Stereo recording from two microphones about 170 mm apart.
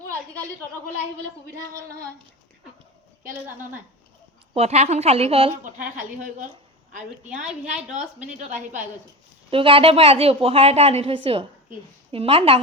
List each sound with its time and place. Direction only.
3.4 s speech: 10° right (ahead or behind)
4.5 s a woman's voice: 40° right (ahead or behind)
5.6 s a woman's voice: 50° right (ahead or behind)
9.5 s a woman's voice: 30° right (ahead or behind)